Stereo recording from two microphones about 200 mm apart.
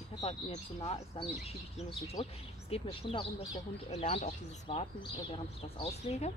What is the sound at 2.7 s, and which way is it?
Speech, 25° left (ahead or behind).